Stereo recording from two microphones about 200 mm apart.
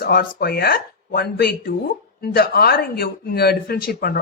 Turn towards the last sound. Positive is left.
turn(degrees=50)  # may be behind; listen again after turning